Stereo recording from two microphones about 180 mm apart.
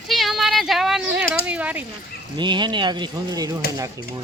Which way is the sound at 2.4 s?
25° right (ahead or behind).